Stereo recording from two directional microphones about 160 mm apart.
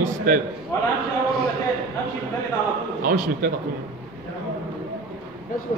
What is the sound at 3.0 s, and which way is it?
Speech, 60° right (ahead or behind).